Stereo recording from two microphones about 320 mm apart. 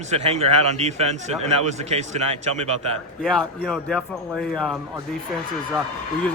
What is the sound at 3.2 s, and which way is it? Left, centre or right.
Speech, centre.